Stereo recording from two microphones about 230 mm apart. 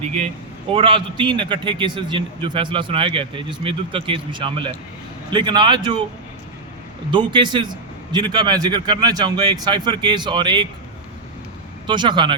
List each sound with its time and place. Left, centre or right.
0.7 s a man's voice: right
7.1 s a man's voice: centre
11.9 s a man's voice: centre